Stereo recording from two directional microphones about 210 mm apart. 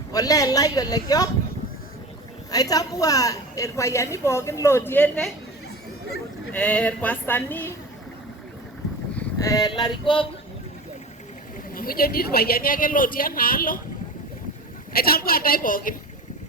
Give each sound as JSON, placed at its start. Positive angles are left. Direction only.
{"t": 0.1, "sound": "a woman's voice", "side_deg": 15}
{"t": 2.5, "sound": "a woman's voice", "side_deg": 15}
{"t": 6.5, "sound": "a woman's voice", "side_deg": 5}
{"t": 9.1, "sound": "a sound", "side_deg": 15}
{"t": 11.7, "sound": "a man's voice", "side_deg": 45}
{"t": 14.9, "sound": "a man's voice", "side_deg": 45}